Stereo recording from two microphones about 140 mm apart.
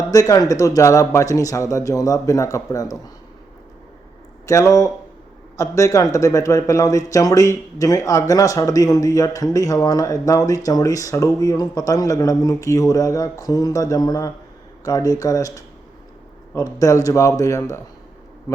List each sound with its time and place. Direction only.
0.1 s speech: 25° left (ahead or behind)
4.4 s speech: 20° left (ahead or behind)